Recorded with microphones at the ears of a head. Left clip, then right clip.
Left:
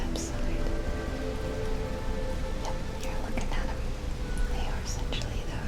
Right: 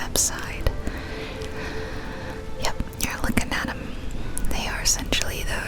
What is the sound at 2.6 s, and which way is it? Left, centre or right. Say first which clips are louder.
Whispering: right 7 dB; right.